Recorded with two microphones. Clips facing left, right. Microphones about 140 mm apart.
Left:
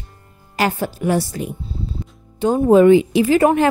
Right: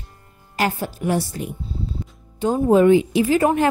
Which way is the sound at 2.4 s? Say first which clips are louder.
Left 3 dB; 80° left.